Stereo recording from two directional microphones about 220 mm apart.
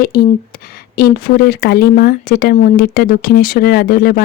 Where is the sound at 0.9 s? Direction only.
45° left (ahead or behind).